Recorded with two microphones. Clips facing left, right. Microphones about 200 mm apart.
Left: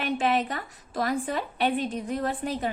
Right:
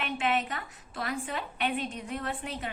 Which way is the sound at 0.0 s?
35° left (ahead or behind).